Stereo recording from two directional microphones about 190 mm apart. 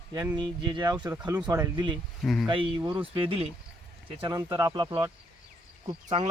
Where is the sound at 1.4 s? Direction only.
20° right (ahead or behind).